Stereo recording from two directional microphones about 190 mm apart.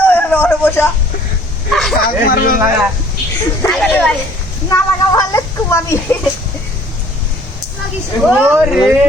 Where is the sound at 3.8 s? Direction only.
5° left (ahead or behind).